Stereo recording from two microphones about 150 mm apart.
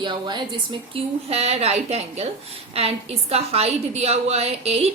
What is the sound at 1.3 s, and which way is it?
A woman's voice, 45° right (ahead or behind).